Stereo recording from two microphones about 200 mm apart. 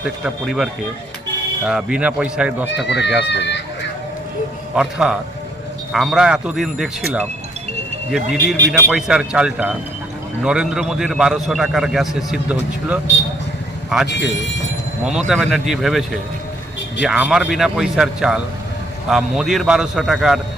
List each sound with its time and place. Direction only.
0.0 s a man's voice: 5° right (ahead or behind)
2.8 s speech: 60° left (ahead or behind)
4.7 s a man's voice: 5° right (ahead or behind)
8.1 s a man's voice: centre (ahead or behind)
15.3 s a man's voice: centre (ahead or behind)